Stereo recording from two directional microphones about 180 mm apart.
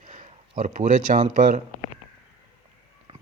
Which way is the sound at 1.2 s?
40° right (ahead or behind).